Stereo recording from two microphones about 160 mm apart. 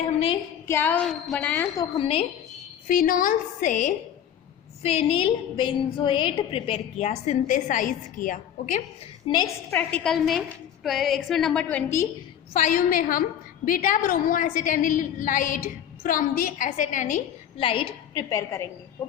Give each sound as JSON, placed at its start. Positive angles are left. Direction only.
{"t": 0.0, "sound": "a woman's voice", "side_deg": 35}
{"t": 0.7, "sound": "a woman's voice", "side_deg": 10}
{"t": 2.0, "sound": "a woman's voice", "side_deg": 35}
{"t": 2.8, "sound": "a woman's voice", "side_deg": 60}
{"t": 4.8, "sound": "a woman's voice", "side_deg": 35}
{"t": 9.3, "sound": "a woman's voice", "side_deg": 25}
{"t": 9.7, "sound": "a woman's voice", "side_deg": 5}
{"t": 12.5, "sound": "a woman's voice", "side_deg": 50}
{"t": 17.6, "sound": "a woman's voice", "side_deg": 35}